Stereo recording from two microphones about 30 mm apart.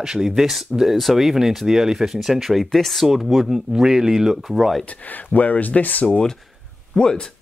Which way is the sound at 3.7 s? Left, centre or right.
Centre.